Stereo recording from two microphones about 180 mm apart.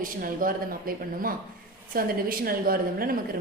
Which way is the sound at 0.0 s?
50° right (ahead or behind).